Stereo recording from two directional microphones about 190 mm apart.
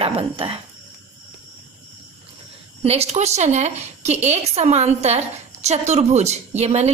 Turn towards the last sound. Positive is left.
turn(degrees=-35)  # may be behind; listen again after turning